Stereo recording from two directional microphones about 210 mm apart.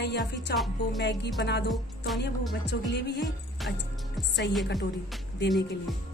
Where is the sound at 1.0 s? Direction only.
55° left (ahead or behind).